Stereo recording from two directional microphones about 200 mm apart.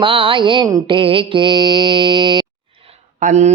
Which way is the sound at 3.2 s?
35° right (ahead or behind).